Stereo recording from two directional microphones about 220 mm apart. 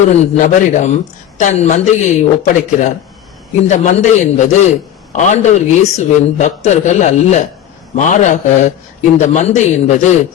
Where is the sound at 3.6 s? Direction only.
30° left (ahead or behind).